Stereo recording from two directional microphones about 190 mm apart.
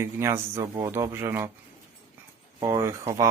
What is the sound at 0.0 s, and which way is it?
Speech, 15° right (ahead or behind).